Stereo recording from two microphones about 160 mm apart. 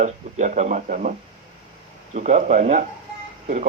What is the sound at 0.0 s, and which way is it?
A man's voice, 50° right (ahead or behind).